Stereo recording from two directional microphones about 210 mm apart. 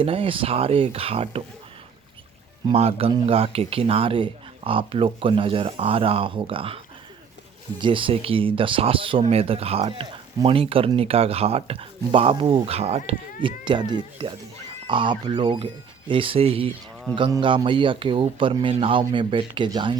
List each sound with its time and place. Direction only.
0.0 s speech: 25° right (ahead or behind)
2.6 s speech: 30° right (ahead or behind)